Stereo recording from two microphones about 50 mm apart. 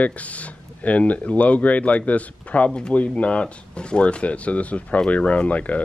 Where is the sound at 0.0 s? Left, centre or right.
Left.